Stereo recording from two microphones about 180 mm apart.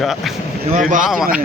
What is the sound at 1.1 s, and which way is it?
Speech, 5° right (ahead or behind).